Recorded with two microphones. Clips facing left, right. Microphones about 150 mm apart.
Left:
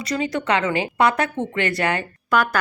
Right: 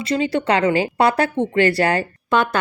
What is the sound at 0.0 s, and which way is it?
Speech, 30° right (ahead or behind).